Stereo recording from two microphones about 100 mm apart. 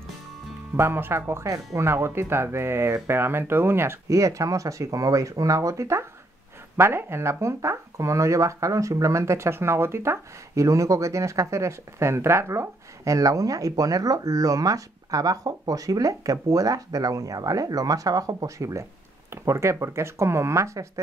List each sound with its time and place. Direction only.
0.7 s speech: 25° right (ahead or behind)